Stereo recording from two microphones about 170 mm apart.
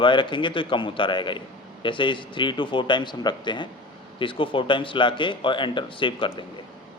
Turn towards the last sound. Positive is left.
turn(degrees=30)  # may be behind; listen again after turning